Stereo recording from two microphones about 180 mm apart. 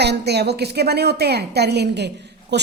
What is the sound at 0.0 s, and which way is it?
A woman's voice, 65° right (ahead or behind).